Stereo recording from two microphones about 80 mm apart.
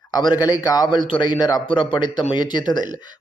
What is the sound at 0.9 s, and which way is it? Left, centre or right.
Speech, left.